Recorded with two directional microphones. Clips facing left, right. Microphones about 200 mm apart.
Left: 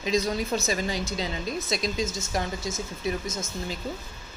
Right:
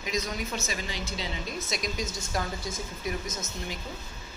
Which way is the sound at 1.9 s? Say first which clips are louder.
Left 4 dB; 25° left (ahead or behind).